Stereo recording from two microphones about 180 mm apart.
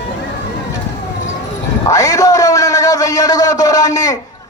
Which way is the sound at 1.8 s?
20° left (ahead or behind).